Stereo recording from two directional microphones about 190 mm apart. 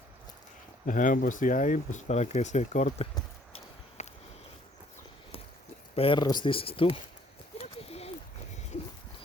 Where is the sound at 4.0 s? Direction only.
35° left (ahead or behind).